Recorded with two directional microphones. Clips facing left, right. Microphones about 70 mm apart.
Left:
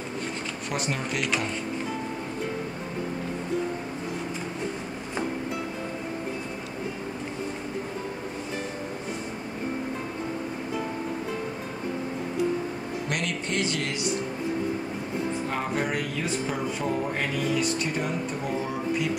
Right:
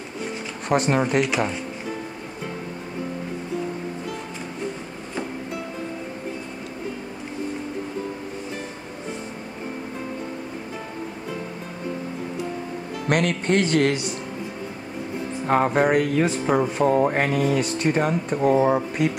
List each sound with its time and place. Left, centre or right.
0.7 s speech: right
13.1 s speech: right
15.4 s speech: right